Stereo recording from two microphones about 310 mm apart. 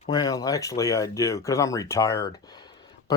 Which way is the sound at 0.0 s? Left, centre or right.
Centre.